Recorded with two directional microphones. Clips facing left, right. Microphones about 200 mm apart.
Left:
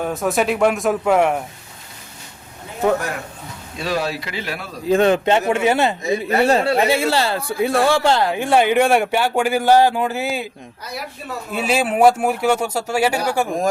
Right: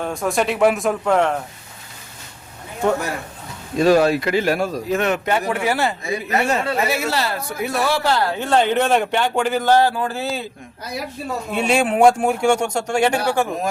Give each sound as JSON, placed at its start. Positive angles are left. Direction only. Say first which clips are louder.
{"t": 0.0, "sound": "speech", "louder": "left 1 dB", "side_deg": 0}
{"t": 3.8, "sound": "speech", "louder": "right 9 dB", "side_deg": -50}
{"t": 4.9, "sound": "a man's voice", "louder": "left 8 dB", "side_deg": 30}
{"t": 8.3, "sound": "speech", "louder": "left 2 dB", "side_deg": 10}
{"t": 11.5, "sound": "speech", "louder": "right 1 dB", "side_deg": 5}